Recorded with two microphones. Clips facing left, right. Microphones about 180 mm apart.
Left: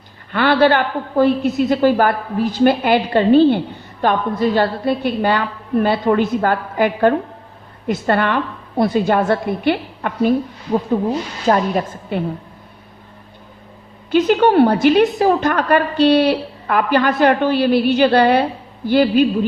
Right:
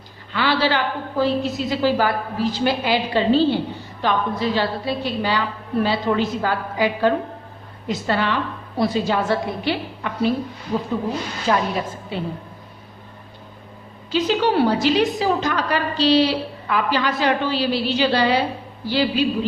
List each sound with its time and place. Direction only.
0.3 s a woman's voice: 55° left (ahead or behind)
11.4 s a woman's voice: 45° left (ahead or behind)
14.1 s a woman's voice: 55° left (ahead or behind)